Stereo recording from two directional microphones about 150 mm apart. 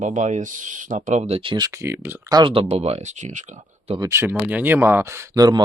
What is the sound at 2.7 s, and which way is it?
Speech, 45° right (ahead or behind).